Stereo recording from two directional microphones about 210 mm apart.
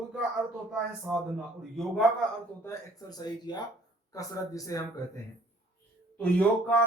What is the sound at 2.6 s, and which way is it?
Speech, 15° left (ahead or behind).